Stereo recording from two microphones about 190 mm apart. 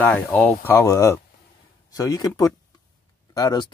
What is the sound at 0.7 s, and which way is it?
Speech, 15° left (ahead or behind).